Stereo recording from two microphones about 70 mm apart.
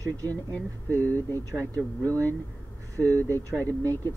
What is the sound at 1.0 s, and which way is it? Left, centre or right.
Speech, left.